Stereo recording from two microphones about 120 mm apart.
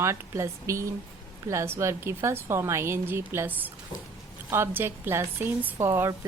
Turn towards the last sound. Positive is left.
turn(degrees=-20)  # may be behind; listen again after turning